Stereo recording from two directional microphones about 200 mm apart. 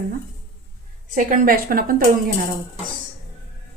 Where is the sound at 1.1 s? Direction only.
45° right (ahead or behind).